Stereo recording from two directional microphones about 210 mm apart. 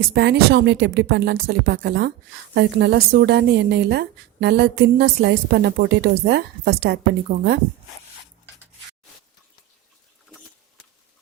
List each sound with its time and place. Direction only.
0.1 s a woman's voice: 50° right (ahead or behind)